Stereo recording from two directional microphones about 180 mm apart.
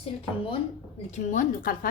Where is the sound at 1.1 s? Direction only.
45° left (ahead or behind).